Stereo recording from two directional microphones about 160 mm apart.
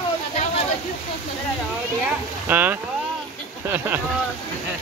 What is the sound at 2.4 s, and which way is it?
Speech, 10° right (ahead or behind).